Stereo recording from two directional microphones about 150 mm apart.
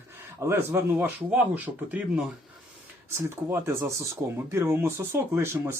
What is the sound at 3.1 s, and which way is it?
Speech, 15° right (ahead or behind).